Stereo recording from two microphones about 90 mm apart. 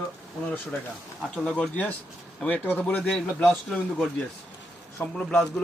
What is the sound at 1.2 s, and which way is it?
Speech, 10° left (ahead or behind).